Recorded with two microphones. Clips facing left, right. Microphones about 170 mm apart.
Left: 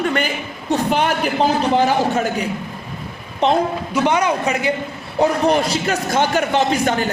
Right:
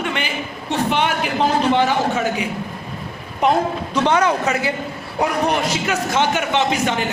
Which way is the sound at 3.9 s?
15° left (ahead or behind).